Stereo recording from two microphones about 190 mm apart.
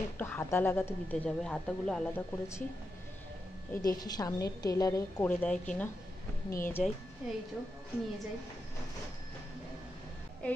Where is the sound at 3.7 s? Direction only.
20° left (ahead or behind); by 6.9 s centre (ahead or behind).